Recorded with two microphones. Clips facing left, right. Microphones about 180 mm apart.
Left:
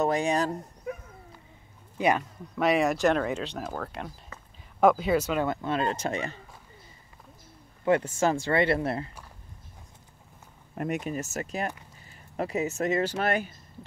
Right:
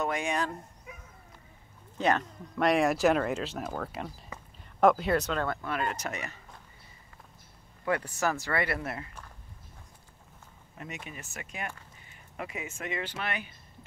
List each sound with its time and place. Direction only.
0.0 s speech: 35° left (ahead or behind)
2.0 s speech: 10° left (ahead or behind)
5.5 s speech: 25° left (ahead or behind)
7.8 s speech: 25° left (ahead or behind)
10.7 s speech: 55° left (ahead or behind)